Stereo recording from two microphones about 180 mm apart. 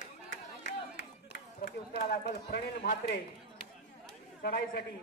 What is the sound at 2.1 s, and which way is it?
A man's voice, 60° left (ahead or behind).